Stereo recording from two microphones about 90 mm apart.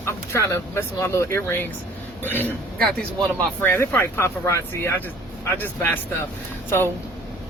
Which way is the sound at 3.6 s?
25° left (ahead or behind).